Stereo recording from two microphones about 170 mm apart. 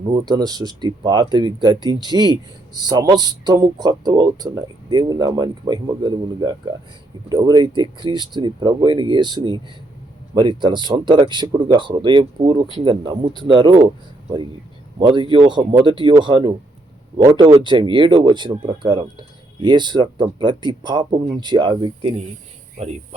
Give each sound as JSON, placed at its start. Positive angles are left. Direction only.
{"t": 0.1, "sound": "speech", "side_deg": -25}
{"t": 14.9, "sound": "speech", "side_deg": -30}